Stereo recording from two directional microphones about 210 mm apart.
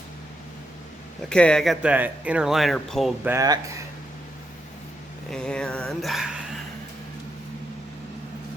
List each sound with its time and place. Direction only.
1.3 s speech: 5° left (ahead or behind)
3.2 s speech: 15° right (ahead or behind)
5.3 s speech: 5° left (ahead or behind)